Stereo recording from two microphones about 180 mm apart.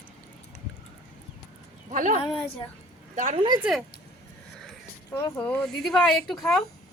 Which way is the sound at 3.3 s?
25° right (ahead or behind).